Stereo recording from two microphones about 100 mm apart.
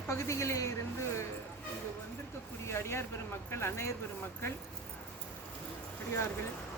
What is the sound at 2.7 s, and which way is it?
Speech, 25° left (ahead or behind).